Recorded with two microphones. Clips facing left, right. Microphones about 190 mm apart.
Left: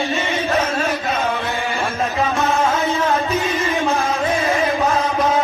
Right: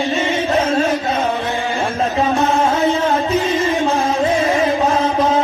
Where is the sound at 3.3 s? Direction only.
30° right (ahead or behind).